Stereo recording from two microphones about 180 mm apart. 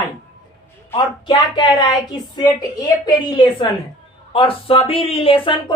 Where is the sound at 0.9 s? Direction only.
25° left (ahead or behind).